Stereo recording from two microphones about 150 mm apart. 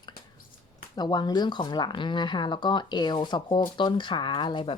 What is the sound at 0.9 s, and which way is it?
Speech, 30° left (ahead or behind).